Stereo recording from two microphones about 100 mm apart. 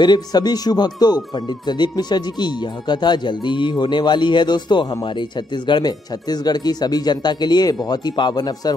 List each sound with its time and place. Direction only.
0.0 s speech: 45° left (ahead or behind)